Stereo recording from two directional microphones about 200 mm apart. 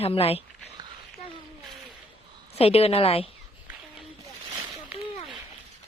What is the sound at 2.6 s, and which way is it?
Speech, 30° left (ahead or behind).